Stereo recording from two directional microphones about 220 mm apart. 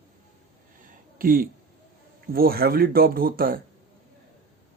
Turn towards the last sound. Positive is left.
turn(degrees=-40)  # may be behind; listen again after turning